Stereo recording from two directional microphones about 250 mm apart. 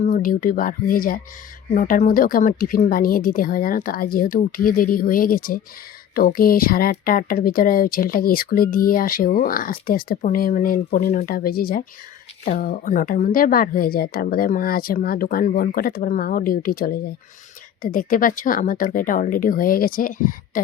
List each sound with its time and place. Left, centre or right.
0.0 s a woman's voice: left